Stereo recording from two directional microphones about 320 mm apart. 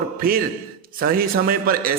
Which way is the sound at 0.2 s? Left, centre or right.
Right.